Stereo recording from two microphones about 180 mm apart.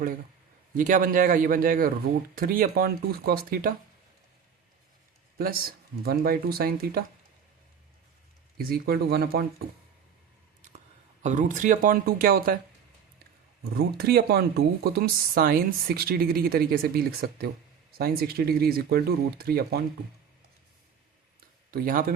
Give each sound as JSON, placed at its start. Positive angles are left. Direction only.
{"t": 0.7, "sound": "speech", "side_deg": -50}
{"t": 5.4, "sound": "speech", "side_deg": -55}
{"t": 8.5, "sound": "speech", "side_deg": -60}
{"t": 11.2, "sound": "speech", "side_deg": -45}
{"t": 13.7, "sound": "speech", "side_deg": -60}
{"t": 21.7, "sound": "speech", "side_deg": -50}